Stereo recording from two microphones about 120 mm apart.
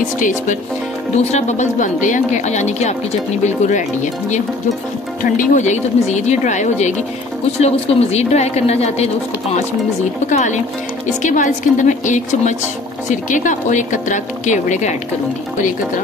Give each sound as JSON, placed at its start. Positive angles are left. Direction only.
{"t": 1.1, "sound": "a woman's voice", "side_deg": 70}
{"t": 3.4, "sound": "a woman's voice", "side_deg": 90}
{"t": 7.6, "sound": "a woman's voice", "side_deg": 60}
{"t": 10.3, "sound": "a woman's voice", "side_deg": 90}